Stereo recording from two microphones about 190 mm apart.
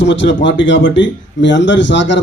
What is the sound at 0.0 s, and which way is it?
A man's voice, 70° left (ahead or behind).